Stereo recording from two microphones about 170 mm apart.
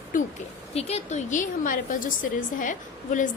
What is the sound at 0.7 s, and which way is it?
A woman's voice, 40° left (ahead or behind).